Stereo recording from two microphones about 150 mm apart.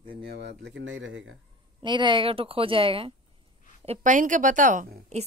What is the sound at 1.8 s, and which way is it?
A woman's voice, 30° right (ahead or behind).